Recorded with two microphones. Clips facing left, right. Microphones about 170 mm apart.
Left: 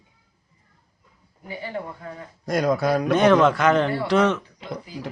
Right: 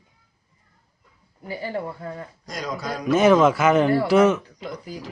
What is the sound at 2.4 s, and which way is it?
Speech, 55° left (ahead or behind).